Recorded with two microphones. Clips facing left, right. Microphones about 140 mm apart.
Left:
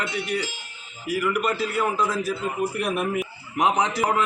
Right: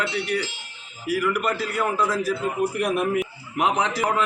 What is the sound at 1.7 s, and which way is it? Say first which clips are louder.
Speech: even; 15° left (ahead or behind).